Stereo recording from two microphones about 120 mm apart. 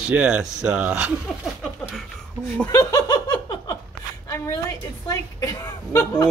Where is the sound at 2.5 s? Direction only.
20° left (ahead or behind).